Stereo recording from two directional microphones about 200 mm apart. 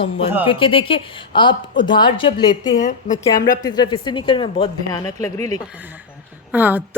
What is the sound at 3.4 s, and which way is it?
Speech, 20° left (ahead or behind).